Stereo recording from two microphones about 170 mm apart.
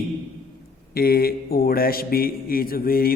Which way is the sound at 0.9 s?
60° left (ahead or behind).